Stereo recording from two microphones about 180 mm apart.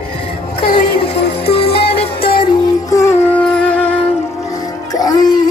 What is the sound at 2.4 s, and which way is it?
Music, 20° left (ahead or behind).